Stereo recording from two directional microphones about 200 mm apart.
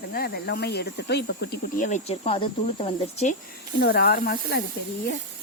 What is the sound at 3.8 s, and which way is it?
Speech, 50° left (ahead or behind).